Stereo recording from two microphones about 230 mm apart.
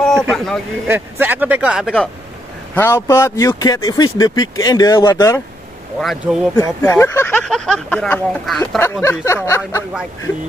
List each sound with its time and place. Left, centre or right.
0.0 s a man's voice: centre
0.8 s speech: centre
2.7 s speech: centre
5.9 s speech: centre
6.5 s speech: centre